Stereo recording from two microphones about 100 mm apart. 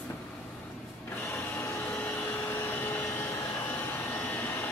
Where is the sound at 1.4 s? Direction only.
20° left (ahead or behind).